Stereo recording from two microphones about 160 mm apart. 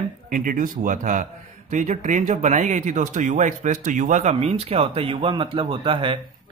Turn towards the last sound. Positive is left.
turn(degrees=-30)  # may be behind; listen again after turning